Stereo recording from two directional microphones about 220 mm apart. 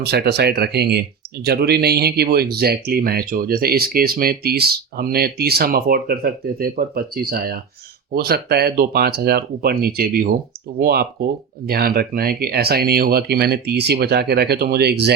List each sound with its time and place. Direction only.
0.0 s speech: 45° right (ahead or behind)